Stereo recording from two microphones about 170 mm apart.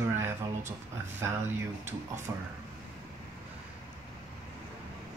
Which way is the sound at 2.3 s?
15° right (ahead or behind).